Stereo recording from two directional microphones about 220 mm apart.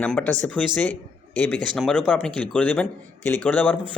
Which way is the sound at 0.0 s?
5° left (ahead or behind).